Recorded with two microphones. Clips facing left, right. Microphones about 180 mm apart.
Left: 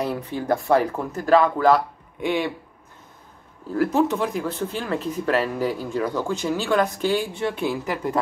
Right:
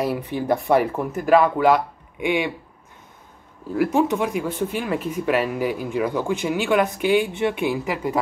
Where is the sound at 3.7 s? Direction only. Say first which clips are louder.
Right 1 dB; 10° right (ahead or behind).